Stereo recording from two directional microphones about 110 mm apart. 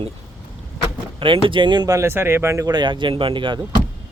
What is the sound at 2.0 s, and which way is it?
Speech, 20° right (ahead or behind).